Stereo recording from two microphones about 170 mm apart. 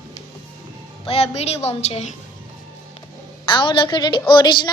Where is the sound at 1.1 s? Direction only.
35° left (ahead or behind).